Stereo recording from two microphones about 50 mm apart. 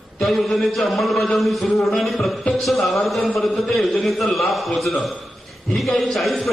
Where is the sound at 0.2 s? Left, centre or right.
Centre.